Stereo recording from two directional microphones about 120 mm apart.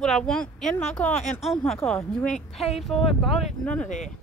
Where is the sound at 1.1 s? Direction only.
75° left (ahead or behind).